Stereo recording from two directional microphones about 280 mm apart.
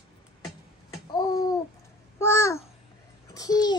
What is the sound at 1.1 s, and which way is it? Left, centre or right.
Babbling, centre.